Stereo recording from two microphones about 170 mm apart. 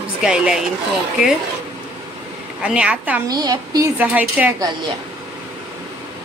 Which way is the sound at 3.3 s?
20° right (ahead or behind).